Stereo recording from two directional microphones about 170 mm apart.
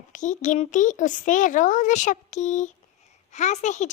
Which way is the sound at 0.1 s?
50° left (ahead or behind).